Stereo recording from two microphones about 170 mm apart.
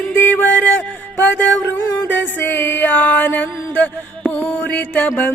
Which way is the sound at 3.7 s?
10° left (ahead or behind).